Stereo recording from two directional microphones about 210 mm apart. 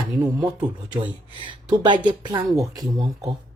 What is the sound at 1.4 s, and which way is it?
Speech, 20° right (ahead or behind).